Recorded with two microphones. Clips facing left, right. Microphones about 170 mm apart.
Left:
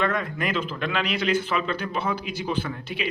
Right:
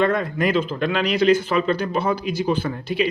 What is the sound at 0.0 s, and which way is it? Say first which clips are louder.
Speech: right 6 dB; 35° right (ahead or behind).